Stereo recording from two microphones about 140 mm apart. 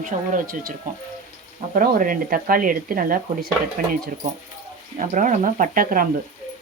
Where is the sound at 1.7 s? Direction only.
80° right.